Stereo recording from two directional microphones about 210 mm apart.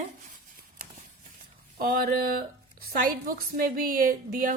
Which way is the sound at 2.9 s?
45° right (ahead or behind).